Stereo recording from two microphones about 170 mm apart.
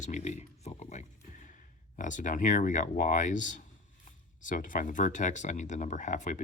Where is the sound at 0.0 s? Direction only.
45° left (ahead or behind).